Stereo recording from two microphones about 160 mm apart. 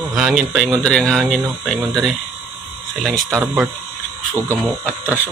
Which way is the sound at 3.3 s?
5° right (ahead or behind).